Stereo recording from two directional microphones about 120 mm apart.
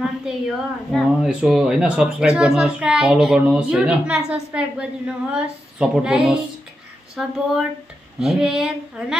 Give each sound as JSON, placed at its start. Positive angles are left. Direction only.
{"t": 0.0, "sound": "a woman's voice", "side_deg": 0}